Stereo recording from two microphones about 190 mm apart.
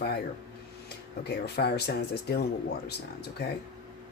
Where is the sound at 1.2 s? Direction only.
60° left (ahead or behind).